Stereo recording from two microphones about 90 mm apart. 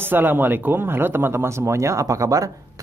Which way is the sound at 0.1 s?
25° right (ahead or behind).